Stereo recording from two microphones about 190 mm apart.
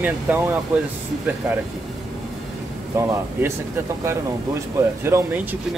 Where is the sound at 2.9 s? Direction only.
15° right (ahead or behind).